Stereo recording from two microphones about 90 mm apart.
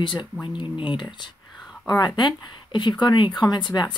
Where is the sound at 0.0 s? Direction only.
70° left (ahead or behind).